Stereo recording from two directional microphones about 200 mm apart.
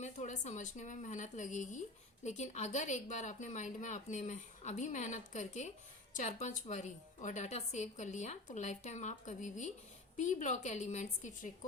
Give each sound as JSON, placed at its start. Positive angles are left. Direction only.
{"t": 0.0, "sound": "a woman's voice", "side_deg": 35}